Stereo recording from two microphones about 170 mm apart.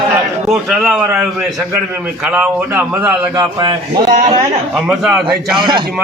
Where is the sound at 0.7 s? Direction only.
5° right (ahead or behind).